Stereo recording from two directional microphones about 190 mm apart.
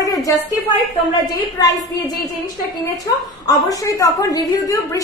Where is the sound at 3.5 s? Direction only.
15° left (ahead or behind).